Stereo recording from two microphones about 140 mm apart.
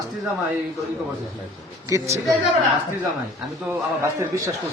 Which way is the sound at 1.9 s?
20° right (ahead or behind).